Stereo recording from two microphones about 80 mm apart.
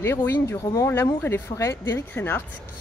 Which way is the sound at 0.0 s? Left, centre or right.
Left.